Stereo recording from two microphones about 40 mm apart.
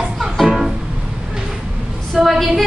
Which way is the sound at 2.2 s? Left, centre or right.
Centre.